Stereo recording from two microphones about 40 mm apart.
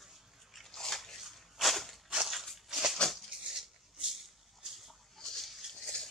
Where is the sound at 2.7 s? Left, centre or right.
Centre.